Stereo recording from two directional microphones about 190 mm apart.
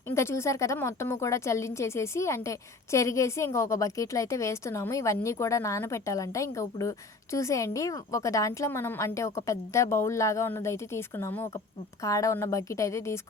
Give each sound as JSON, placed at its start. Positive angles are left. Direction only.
{"t": 0.1, "sound": "a woman's voice", "side_deg": 15}